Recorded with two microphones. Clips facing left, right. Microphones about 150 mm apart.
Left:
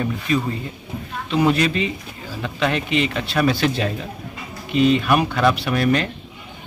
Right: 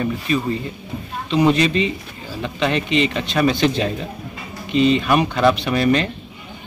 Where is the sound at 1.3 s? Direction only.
5° left (ahead or behind).